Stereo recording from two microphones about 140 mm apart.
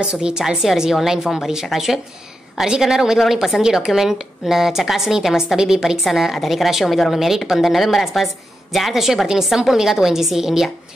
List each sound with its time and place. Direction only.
0.0 s a woman's voice: 5° right (ahead or behind)